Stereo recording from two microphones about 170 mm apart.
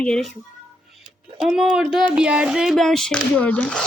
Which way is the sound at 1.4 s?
5° right (ahead or behind).